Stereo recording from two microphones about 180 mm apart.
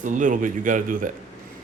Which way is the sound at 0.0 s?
45° right (ahead or behind).